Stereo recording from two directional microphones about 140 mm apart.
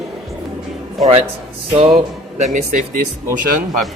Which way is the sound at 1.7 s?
50° right (ahead or behind).